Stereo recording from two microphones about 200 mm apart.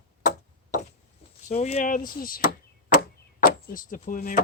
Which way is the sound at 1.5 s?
35° left (ahead or behind).